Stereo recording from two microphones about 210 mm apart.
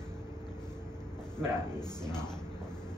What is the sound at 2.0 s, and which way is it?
Speech, 5° left (ahead or behind).